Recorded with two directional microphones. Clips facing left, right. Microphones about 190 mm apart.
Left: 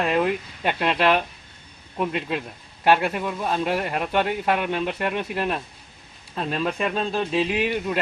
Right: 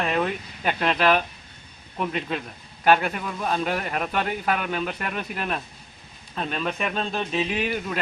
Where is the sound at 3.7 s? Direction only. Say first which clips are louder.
Left 2 dB; 30° left (ahead or behind).